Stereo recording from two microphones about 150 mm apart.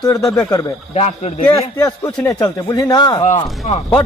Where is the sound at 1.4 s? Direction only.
20° left (ahead or behind).